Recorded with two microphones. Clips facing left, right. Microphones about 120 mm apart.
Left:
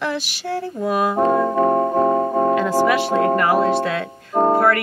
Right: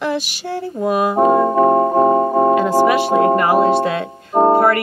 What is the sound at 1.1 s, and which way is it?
Speech, 20° right (ahead or behind).